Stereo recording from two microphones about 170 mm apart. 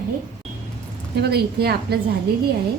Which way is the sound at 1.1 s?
70° right (ahead or behind).